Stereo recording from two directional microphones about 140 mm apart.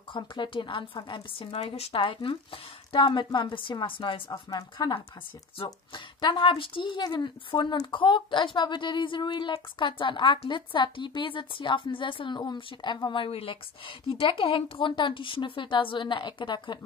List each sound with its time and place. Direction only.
0.1 s speech: 35° left (ahead or behind)